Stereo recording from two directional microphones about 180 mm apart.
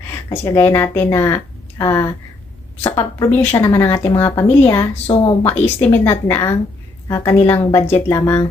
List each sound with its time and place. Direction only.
0.5 s speech: 15° left (ahead or behind)
5.0 s speech: 30° left (ahead or behind)
5.4 s speech: 10° left (ahead or behind)